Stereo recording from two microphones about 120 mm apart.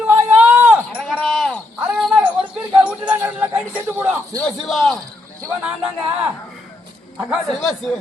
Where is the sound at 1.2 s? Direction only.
Centre (ahead or behind).